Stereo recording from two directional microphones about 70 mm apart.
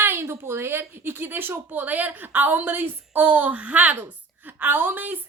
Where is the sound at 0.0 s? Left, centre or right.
Right.